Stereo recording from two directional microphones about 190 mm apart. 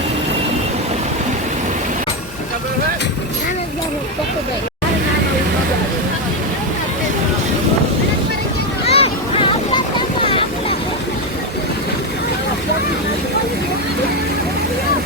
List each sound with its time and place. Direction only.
8.9 s boat: 30° left (ahead or behind)